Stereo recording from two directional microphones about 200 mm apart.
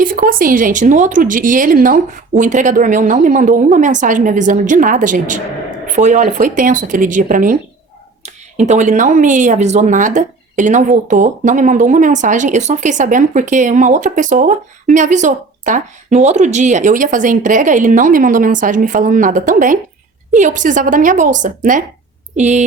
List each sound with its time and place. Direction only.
0.0 s speech: 45° right (ahead or behind)